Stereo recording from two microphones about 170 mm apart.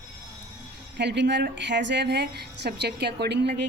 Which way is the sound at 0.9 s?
90° right.